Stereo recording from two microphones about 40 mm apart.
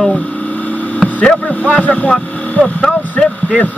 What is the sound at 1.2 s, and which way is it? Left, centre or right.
Speech, left.